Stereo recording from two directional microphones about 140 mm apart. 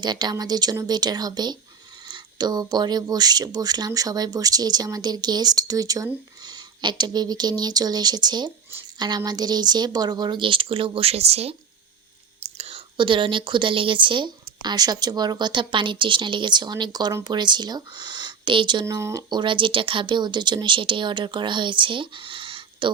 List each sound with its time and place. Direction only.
0.0 s speech: 30° right (ahead or behind)
18.9 s speech: 25° right (ahead or behind); by 22.9 s 40° right (ahead or behind)